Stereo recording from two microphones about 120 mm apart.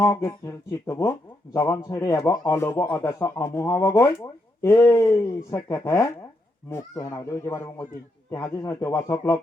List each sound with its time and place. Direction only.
0.0 s a man's voice: 25° left (ahead or behind)